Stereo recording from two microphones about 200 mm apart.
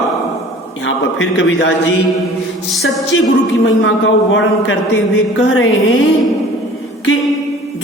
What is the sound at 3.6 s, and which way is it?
A man's voice, 75° left (ahead or behind).